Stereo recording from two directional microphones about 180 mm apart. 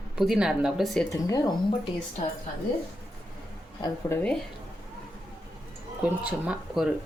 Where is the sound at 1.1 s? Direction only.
20° left (ahead or behind).